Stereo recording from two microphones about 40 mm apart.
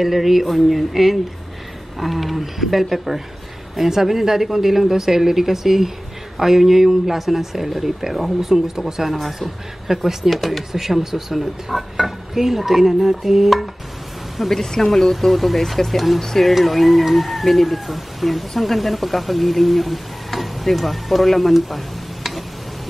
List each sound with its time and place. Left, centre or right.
0.0 s speech: centre
10.7 s speech: centre
14.5 s speech: centre